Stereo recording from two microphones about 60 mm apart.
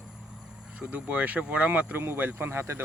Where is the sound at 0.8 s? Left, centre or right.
Right.